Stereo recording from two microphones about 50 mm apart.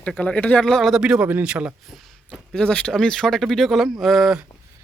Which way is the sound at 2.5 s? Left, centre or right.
Centre.